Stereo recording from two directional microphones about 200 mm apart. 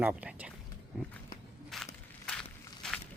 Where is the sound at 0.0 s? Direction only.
10° right (ahead or behind).